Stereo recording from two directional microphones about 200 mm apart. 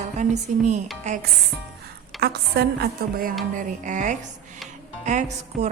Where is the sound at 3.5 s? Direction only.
40° right (ahead or behind).